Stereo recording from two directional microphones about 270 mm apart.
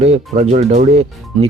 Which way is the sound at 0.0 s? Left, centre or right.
Right.